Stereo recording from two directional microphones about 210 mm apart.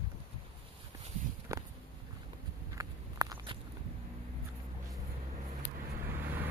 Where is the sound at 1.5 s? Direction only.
15° right (ahead or behind).